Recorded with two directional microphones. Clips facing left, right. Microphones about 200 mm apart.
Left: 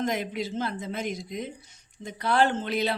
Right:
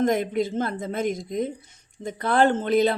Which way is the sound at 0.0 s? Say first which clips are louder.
Right 7 dB; 50° right (ahead or behind).